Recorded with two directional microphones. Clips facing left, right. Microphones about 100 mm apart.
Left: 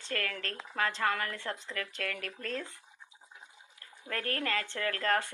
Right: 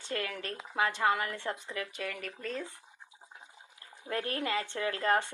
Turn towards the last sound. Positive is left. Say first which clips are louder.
# right 2 dB
turn(degrees=-20)  # may be behind; listen again after turning